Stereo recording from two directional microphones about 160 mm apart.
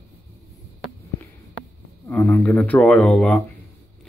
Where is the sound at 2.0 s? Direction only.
20° left (ahead or behind).